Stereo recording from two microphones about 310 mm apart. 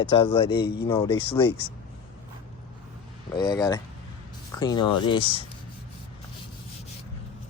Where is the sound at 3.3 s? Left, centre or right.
Centre.